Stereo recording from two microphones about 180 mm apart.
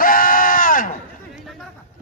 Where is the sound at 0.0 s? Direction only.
50° left (ahead or behind).